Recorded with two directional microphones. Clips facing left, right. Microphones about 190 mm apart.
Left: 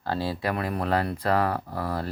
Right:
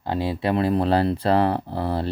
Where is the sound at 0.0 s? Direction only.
20° right (ahead or behind).